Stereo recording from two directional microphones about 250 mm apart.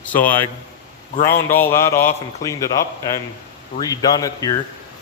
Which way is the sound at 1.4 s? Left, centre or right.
Centre.